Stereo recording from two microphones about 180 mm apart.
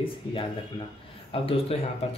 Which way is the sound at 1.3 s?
30° left (ahead or behind).